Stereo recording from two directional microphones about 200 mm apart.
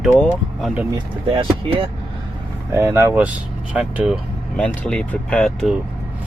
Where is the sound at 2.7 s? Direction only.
10° right (ahead or behind).